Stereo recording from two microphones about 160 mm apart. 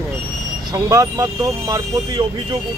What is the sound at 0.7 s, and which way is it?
Speech, 20° right (ahead or behind).